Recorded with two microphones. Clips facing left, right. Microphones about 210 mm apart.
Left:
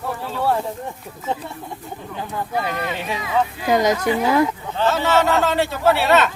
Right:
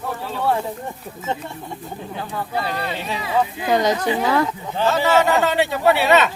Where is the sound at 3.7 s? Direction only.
10° left (ahead or behind).